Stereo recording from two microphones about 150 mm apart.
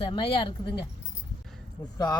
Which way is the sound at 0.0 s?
35° left (ahead or behind).